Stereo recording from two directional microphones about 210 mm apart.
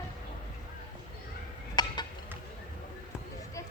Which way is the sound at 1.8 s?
20° left (ahead or behind).